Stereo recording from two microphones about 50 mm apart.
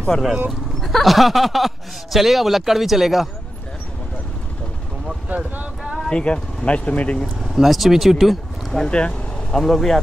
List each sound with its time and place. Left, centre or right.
0.1 s speech: centre
0.5 s speech: centre
5.0 s vehicle: right
6.0 s speech: centre
7.4 s speech: centre
8.8 s speech: centre
9.6 s speech: centre